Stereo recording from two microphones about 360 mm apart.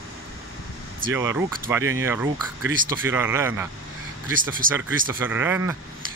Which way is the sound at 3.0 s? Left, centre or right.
Centre.